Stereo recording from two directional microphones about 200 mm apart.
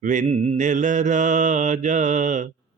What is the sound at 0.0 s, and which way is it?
Mantra, 40° right (ahead or behind).